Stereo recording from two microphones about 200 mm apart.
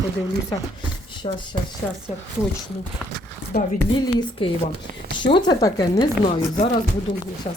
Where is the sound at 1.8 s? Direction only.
5° left (ahead or behind).